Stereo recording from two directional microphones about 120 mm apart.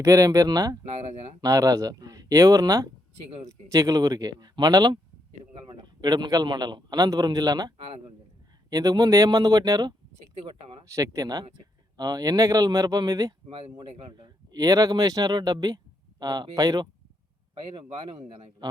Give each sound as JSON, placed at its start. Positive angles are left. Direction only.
{"t": 0.0, "sound": "speech", "side_deg": -25}
{"t": 0.9, "sound": "speech", "side_deg": -65}
{"t": 1.4, "sound": "speech", "side_deg": -30}
{"t": 8.7, "sound": "speech", "side_deg": -30}
{"t": 10.3, "sound": "a man's voice", "side_deg": -45}
{"t": 10.8, "sound": "speech", "side_deg": -25}
{"t": 17.7, "sound": "a man's voice", "side_deg": -50}